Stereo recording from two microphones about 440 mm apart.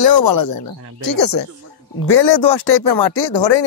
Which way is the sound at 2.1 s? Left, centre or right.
Left.